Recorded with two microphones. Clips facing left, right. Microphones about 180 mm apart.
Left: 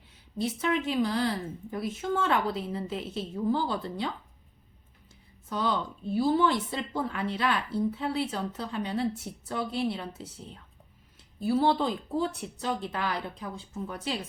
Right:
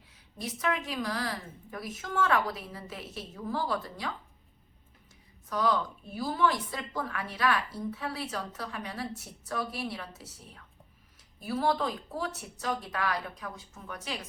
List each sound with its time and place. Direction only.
0.3 s speech: 25° left (ahead or behind)
5.5 s speech: 25° left (ahead or behind)